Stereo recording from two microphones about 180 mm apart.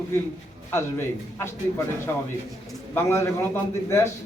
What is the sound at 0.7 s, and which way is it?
A man's voice, 15° left (ahead or behind).